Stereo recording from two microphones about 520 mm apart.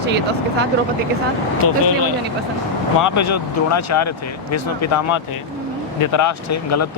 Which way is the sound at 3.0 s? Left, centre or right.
Left.